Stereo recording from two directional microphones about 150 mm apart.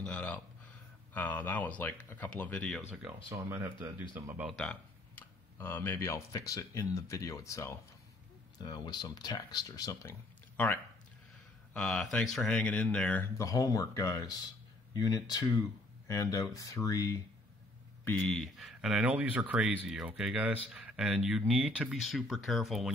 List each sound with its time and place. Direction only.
0.0 s a sound: 10° left (ahead or behind)
1.1 s speech: 10° left (ahead or behind)
2.9 s speech: 10° right (ahead or behind)
4.5 s speech: 5° left (ahead or behind); by 10.1 s 25° left (ahead or behind)
11.7 s speech: 5° left (ahead or behind)
13.4 s speech: 20° left (ahead or behind)
18.0 s speech: 5° left (ahead or behind)